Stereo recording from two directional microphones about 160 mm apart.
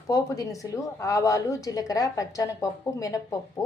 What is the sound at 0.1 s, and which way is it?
A woman's voice, 20° left (ahead or behind).